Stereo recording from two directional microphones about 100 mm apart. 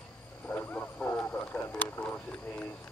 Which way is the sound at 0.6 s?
20° left (ahead or behind).